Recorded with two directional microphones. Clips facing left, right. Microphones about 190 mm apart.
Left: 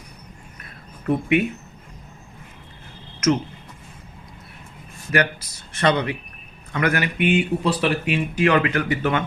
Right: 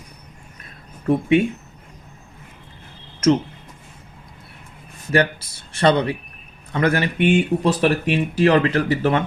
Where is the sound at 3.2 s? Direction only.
30° right (ahead or behind).